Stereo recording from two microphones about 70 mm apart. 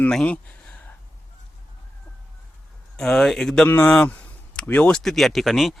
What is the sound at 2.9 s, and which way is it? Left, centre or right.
Speech, centre.